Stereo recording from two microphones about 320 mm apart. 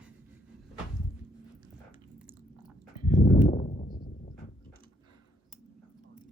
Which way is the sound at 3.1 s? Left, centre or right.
Left.